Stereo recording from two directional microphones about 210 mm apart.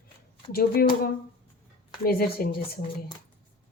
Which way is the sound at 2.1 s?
45° left (ahead or behind).